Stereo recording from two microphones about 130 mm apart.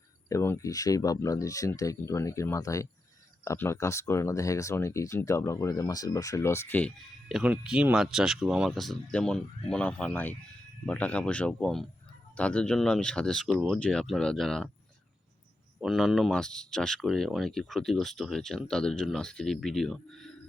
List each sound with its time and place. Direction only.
0.3 s speech: 20° left (ahead or behind)
7.3 s speech: 5° right (ahead or behind)
15.8 s speech: centre (ahead or behind)